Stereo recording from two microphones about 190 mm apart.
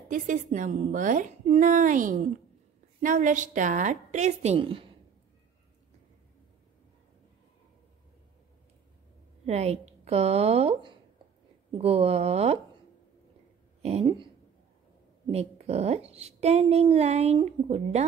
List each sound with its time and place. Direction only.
0.1 s a woman's voice: 45° right (ahead or behind); by 4.9 s 30° right (ahead or behind)
9.5 s a woman's voice: 35° right (ahead or behind)
13.8 s speech: 30° right (ahead or behind)
15.3 s a woman's voice: 35° right (ahead or behind)